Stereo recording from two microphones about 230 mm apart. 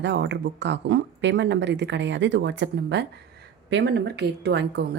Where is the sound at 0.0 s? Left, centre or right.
Right.